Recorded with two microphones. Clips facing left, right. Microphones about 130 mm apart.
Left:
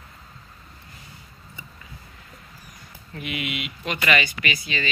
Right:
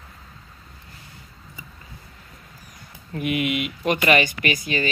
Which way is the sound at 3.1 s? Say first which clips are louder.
Right 7 dB; 50° right (ahead or behind).